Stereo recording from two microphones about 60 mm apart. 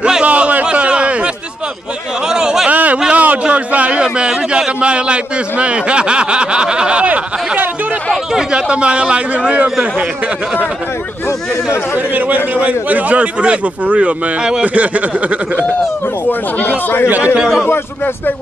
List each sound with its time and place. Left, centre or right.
0.0 s a sound: centre
2.7 s a sound: right
3.0 s a man's voice: right
8.3 s a man's voice: centre
11.2 s speech: left
12.1 s speech: right
16.3 s speech: left
17.2 s a man's voice: centre
17.6 s speech: left